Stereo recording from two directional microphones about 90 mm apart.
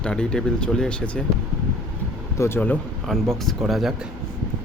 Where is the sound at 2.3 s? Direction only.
30° left (ahead or behind).